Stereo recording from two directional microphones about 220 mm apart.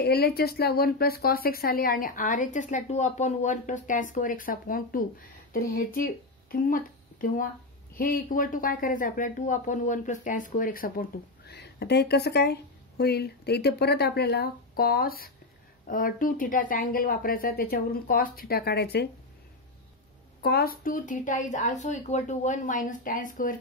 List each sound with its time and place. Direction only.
0.0 s a woman's voice: 45° left (ahead or behind)
20.4 s speech: 45° left (ahead or behind)